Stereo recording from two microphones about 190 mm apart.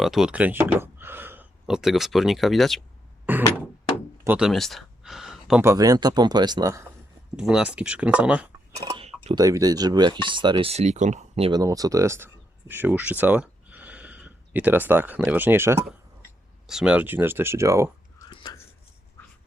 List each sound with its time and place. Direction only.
0.0 s speech: centre (ahead or behind)
3.3 s door: 10° right (ahead or behind)
4.2 s a sound: 5° right (ahead or behind)
5.6 s speech: 20° right (ahead or behind)
7.3 s speech: 5° right (ahead or behind)
8.8 s a sound: 30° right (ahead or behind)
9.4 s speech: 20° right (ahead or behind); by 11.5 s 35° right (ahead or behind)
11.5 s speech: 20° right (ahead or behind)
18.3 s a sound: 20° left (ahead or behind)